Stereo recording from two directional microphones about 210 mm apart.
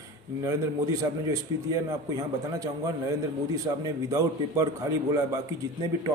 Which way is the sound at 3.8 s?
15° right (ahead or behind).